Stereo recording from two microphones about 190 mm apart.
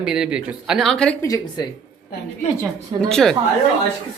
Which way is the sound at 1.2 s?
20° left (ahead or behind).